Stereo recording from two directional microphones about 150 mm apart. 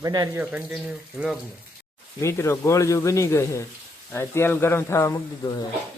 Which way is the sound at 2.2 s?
20° left (ahead or behind).